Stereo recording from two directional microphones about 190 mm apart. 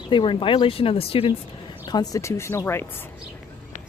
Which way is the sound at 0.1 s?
25° left (ahead or behind).